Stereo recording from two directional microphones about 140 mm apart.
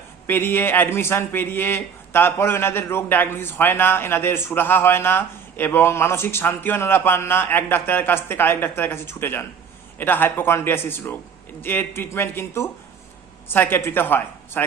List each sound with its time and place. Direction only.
0.3 s speech: 15° left (ahead or behind)